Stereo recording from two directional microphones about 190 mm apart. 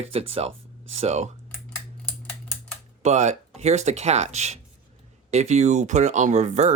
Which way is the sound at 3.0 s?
35° right (ahead or behind).